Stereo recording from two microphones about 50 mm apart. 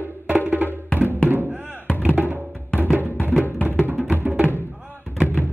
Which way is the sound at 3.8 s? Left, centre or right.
Right.